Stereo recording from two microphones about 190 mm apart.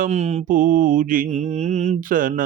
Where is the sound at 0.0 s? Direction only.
35° right (ahead or behind).